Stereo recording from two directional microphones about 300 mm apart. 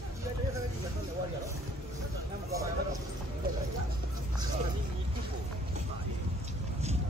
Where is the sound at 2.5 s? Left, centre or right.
Centre.